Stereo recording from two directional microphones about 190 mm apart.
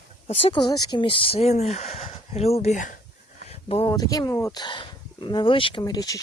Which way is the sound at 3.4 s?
30° left (ahead or behind).